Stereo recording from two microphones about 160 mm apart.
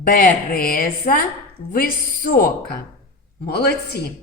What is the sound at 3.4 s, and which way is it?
Speech, 85° left.